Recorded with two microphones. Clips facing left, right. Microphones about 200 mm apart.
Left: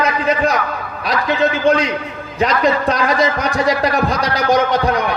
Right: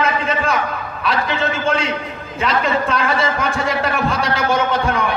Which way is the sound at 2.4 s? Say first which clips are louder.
Left 3 dB; 40° left (ahead or behind).